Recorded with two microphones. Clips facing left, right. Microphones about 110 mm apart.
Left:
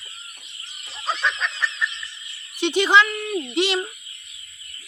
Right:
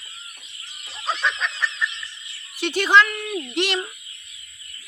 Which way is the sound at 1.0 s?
Centre (ahead or behind).